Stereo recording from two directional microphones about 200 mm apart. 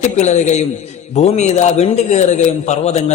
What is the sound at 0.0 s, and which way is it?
A man's voice, 35° left (ahead or behind).